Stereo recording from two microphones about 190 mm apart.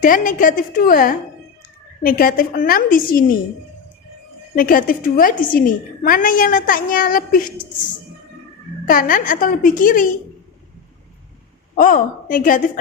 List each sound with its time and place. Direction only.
0.0 s a woman's voice: 45° left (ahead or behind)
4.5 s a woman's voice: 50° left (ahead or behind)
8.9 s a woman's voice: 45° left (ahead or behind)
11.8 s a woman's voice: 45° left (ahead or behind)